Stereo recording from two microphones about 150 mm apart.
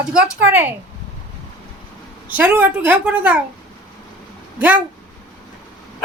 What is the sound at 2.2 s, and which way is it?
A woman's voice, 10° right (ahead or behind).